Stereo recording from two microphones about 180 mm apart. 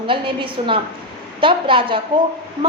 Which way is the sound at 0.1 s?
30° right (ahead or behind).